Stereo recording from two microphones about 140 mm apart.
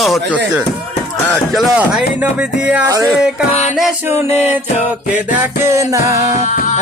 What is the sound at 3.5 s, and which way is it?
Music, 50° left (ahead or behind).